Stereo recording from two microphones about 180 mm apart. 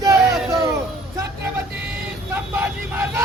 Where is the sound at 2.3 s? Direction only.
10° right (ahead or behind).